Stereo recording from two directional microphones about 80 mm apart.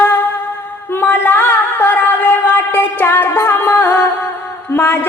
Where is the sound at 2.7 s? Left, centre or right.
Left.